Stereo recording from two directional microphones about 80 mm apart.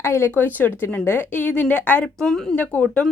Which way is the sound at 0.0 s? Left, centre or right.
Left.